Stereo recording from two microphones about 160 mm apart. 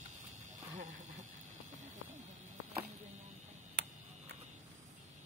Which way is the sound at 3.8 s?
90° right.